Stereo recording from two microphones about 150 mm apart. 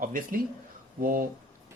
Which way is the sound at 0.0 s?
65° right (ahead or behind).